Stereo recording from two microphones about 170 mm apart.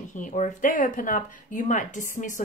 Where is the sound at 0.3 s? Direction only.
45° left (ahead or behind).